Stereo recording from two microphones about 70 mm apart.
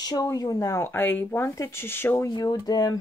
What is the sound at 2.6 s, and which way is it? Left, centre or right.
Speech, left.